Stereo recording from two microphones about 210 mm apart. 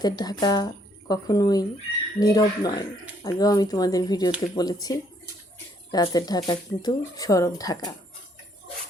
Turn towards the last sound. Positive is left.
turn(degrees=20)  # may be behind; listen again after turning